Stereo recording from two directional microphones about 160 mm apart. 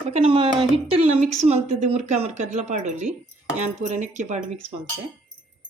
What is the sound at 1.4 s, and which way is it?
Speech, 45° right (ahead or behind).